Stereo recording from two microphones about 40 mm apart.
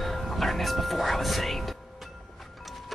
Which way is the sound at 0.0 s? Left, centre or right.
Centre.